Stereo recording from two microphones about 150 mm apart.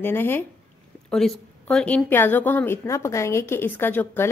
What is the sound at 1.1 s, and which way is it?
A woman's voice, 5° left (ahead or behind).